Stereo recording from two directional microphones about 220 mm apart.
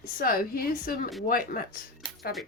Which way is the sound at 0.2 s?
40° left (ahead or behind).